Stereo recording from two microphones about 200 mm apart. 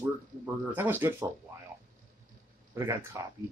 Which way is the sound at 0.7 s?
10° right (ahead or behind).